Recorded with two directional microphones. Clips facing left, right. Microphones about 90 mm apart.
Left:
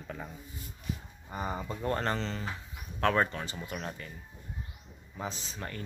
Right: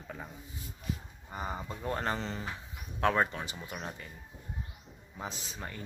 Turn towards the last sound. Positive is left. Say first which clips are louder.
# left 2 dB
turn(degrees=-10)  # may be behind; listen again after turning